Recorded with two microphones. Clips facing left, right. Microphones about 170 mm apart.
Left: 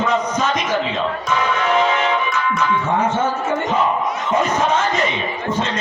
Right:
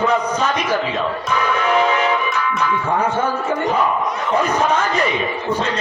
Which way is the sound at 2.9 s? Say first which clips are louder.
Even; 35° right (ahead or behind).